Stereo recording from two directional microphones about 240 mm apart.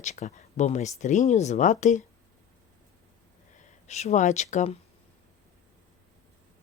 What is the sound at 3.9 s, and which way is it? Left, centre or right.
Speech, left.